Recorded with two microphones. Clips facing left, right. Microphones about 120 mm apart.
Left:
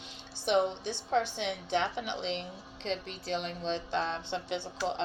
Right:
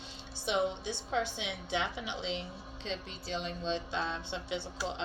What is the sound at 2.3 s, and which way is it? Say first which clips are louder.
A woman's voice: left 2 dB; 60° left (ahead or behind).